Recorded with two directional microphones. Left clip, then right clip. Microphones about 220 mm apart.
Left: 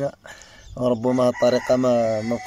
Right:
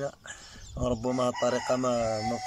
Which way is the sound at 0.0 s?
15° left (ahead or behind).